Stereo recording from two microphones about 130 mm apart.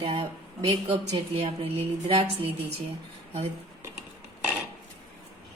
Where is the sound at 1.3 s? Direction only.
45° right (ahead or behind).